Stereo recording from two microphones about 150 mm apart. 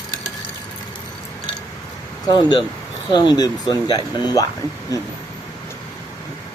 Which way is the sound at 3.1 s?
30° left (ahead or behind).